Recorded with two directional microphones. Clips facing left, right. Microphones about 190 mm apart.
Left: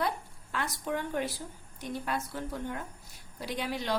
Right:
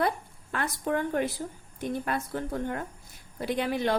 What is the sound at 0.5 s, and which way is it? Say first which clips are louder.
A woman's voice: right 4 dB; 55° right (ahead or behind).